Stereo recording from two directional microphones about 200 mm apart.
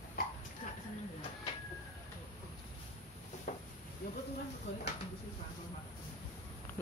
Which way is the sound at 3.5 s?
40° left (ahead or behind).